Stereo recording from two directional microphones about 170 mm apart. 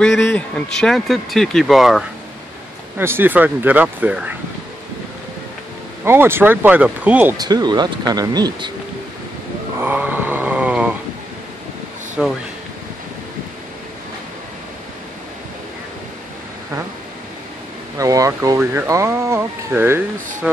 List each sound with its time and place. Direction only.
0.0 s speech: 5° left (ahead or behind)
3.0 s speech: 15° right (ahead or behind)
6.0 s speech: 15° right (ahead or behind)
7.3 s speech: 25° right (ahead or behind)
9.8 s a sound: 10° right (ahead or behind)
12.2 s speech: centre (ahead or behind)
17.9 s speech: 20° right (ahead or behind)